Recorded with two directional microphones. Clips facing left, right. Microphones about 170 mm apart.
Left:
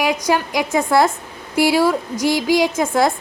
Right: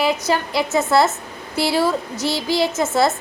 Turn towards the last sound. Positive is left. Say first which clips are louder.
# left 1 dB
turn(degrees=10)  # may be behind; listen again after turning